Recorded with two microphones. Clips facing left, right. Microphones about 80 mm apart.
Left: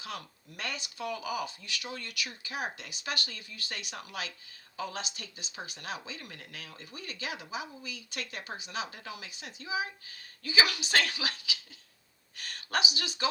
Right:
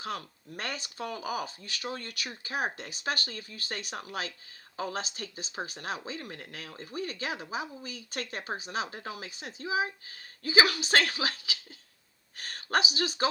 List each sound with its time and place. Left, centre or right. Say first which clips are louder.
0.0 s speech: right 5 dB; right